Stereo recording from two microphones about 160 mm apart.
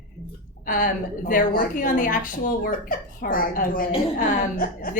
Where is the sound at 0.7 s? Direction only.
55° left (ahead or behind).